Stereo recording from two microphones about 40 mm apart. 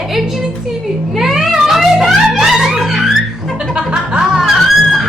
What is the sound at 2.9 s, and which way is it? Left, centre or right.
Music, centre.